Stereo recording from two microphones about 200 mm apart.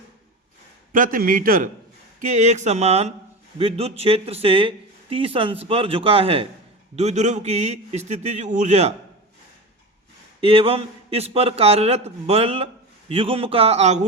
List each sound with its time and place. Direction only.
0.9 s a man's voice: 45° right (ahead or behind)
10.4 s a man's voice: 30° right (ahead or behind)